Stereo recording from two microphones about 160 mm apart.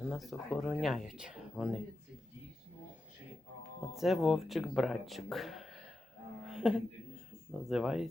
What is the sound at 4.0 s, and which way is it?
Speech, centre (ahead or behind).